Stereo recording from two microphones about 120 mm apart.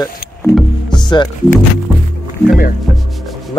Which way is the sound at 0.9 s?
40° left (ahead or behind).